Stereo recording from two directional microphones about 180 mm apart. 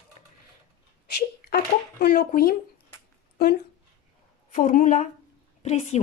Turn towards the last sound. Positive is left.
turn(degrees=40)  # may be behind; listen again after turning